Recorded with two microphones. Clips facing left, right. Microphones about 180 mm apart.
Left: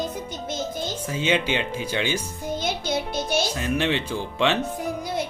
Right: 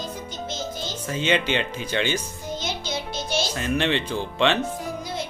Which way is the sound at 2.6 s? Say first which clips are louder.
Left 5 dB; 55° left (ahead or behind).